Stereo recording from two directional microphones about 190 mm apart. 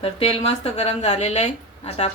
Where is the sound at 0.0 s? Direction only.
30° left (ahead or behind).